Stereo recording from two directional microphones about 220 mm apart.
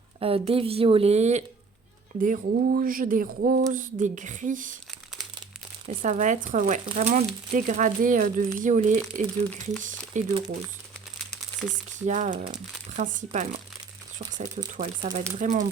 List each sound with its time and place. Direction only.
0.2 s a woman's voice: 25° right (ahead or behind)
6.0 s speech: 35° right (ahead or behind)
12.0 s speech: 35° right (ahead or behind)
14.6 s speech: 35° right (ahead or behind)